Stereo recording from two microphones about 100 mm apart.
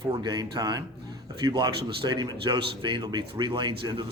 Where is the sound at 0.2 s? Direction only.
45° right (ahead or behind).